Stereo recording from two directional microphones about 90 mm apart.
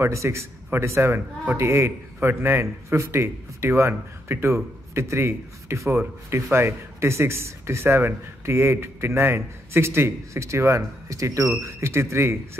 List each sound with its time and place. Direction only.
0.0 s speech: 30° right (ahead or behind)